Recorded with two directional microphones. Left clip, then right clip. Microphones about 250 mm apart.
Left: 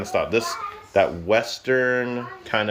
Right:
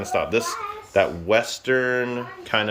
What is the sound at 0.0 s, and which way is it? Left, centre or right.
Speech, centre.